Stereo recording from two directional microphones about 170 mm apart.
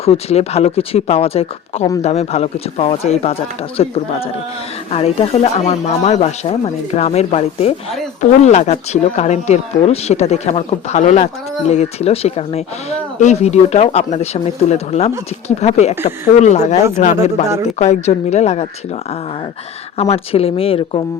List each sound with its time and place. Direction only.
0.0 s speech: 35° left (ahead or behind)
20.0 s speech: 35° left (ahead or behind)